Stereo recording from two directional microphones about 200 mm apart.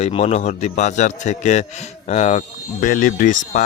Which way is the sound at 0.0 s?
30° left (ahead or behind).